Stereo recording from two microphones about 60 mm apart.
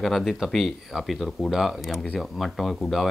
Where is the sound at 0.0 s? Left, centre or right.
Centre.